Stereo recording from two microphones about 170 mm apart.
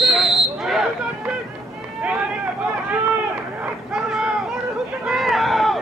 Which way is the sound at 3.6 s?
5° right (ahead or behind).